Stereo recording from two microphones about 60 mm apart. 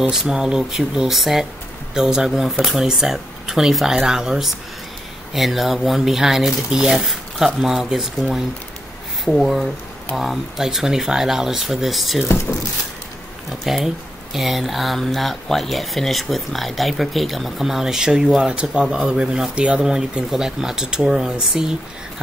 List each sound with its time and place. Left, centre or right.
0.1 s speech: centre
12.3 s speech: left
13.5 s speech: centre